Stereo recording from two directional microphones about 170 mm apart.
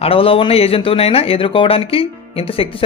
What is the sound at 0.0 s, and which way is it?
Speech, 35° left (ahead or behind).